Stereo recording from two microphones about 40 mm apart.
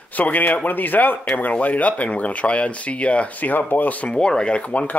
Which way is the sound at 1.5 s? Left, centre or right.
Left.